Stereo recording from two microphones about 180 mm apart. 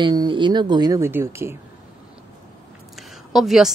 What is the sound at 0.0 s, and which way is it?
Speech, 25° right (ahead or behind).